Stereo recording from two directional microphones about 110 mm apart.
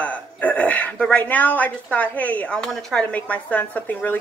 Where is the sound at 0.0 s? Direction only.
15° left (ahead or behind).